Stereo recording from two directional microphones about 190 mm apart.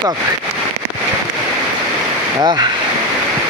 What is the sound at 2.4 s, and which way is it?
Speech, 20° right (ahead or behind).